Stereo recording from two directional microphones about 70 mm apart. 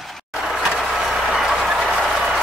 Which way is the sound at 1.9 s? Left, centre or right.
Centre.